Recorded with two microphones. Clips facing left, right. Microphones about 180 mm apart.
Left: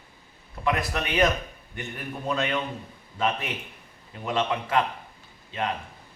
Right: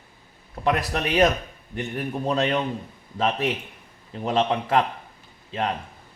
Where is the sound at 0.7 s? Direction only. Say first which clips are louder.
Right 3 dB; 40° right (ahead or behind).